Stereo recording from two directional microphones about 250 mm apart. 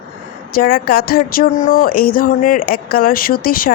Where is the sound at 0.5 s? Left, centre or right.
Left.